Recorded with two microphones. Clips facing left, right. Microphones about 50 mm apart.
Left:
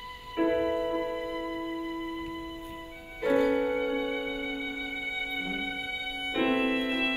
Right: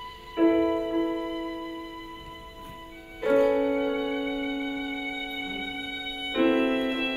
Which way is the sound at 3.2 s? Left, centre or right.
Right.